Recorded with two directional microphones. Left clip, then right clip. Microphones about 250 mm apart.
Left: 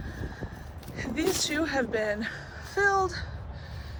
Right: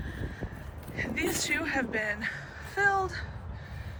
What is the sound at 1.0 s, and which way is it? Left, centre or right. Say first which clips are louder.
Speech: left 2 dB; centre.